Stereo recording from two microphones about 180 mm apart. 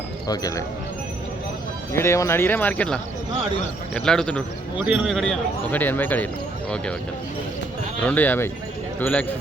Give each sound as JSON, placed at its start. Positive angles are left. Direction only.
{"t": 0.3, "sound": "speech", "side_deg": 20}
{"t": 1.9, "sound": "a man's voice", "side_deg": 15}
{"t": 8.0, "sound": "speech", "side_deg": 10}